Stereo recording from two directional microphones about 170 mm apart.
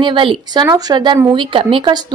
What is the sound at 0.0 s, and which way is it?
A woman's voice, 30° right (ahead or behind).